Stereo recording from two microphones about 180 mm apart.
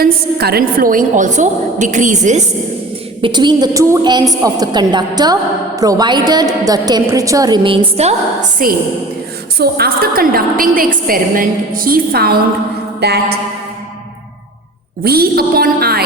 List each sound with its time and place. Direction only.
0.0 s a woman's voice: 60° right (ahead or behind); by 2.4 s 40° right (ahead or behind)
3.2 s a woman's voice: 25° right (ahead or behind); by 8.7 s 45° right (ahead or behind)
9.6 s a woman's voice: 60° right (ahead or behind)
13.0 s music: 60° right (ahead or behind)
15.0 s music: 60° right (ahead or behind)